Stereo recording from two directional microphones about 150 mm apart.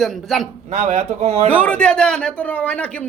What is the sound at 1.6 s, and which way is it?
A man's voice, 5° left (ahead or behind).